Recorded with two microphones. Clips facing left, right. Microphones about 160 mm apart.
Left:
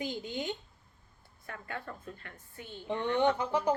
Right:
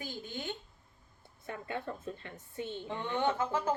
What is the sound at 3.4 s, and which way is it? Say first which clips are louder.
Speech: left 2 dB; 15° left (ahead or behind).